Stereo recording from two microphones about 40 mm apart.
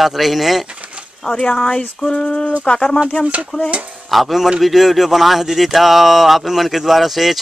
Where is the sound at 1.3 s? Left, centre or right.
Left.